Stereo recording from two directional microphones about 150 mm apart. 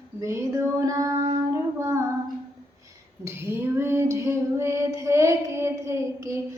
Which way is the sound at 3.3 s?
15° right (ahead or behind).